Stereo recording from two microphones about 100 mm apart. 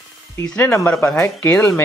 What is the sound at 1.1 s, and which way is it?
Speech, 10° left (ahead or behind).